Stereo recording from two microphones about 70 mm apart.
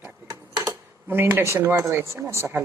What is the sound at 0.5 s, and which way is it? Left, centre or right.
Dishes, right.